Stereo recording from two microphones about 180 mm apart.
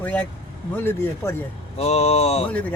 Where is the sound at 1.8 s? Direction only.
35° left (ahead or behind).